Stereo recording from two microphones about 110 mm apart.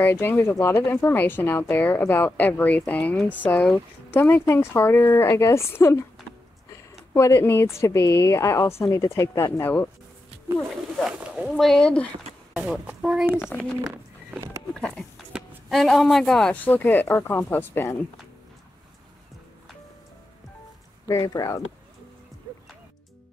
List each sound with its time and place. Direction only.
0.0 s speech: 20° left (ahead or behind)
7.2 s speech: 25° left (ahead or behind)
11.1 s speech: 10° right (ahead or behind)
11.6 s speech: 5° left (ahead or behind)
12.5 s speech: 5° right (ahead or behind)
13.3 s speech: 20° left (ahead or behind)
14.7 s speech: 5° left (ahead or behind)
21.1 s speech: 30° left (ahead or behind)